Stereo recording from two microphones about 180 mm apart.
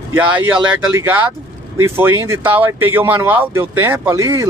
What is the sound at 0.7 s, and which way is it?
A man's voice, 10° right (ahead or behind).